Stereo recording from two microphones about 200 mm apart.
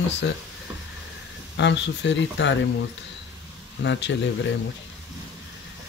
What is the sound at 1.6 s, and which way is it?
Speech, 60° left (ahead or behind).